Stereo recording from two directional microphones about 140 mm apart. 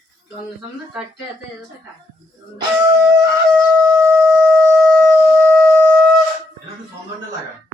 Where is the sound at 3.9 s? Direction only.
25° right (ahead or behind).